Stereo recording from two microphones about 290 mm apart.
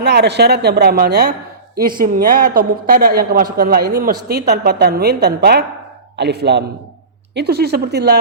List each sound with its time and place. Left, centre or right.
0.0 s a woman's voice: right